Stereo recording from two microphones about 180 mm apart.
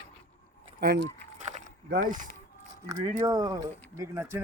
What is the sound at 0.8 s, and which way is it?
Speech, 60° right (ahead or behind).